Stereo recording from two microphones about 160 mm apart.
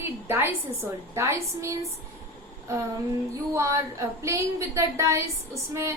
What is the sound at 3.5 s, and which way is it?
A woman's voice, 20° right (ahead or behind).